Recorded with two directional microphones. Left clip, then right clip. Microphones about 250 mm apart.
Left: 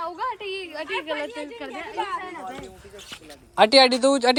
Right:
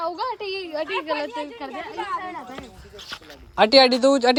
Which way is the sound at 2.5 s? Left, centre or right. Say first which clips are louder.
Even; centre.